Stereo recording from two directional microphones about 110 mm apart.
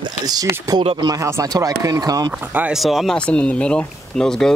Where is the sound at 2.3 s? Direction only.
15° right (ahead or behind).